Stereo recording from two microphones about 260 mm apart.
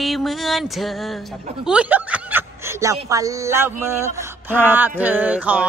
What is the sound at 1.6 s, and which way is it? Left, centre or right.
Speech, centre.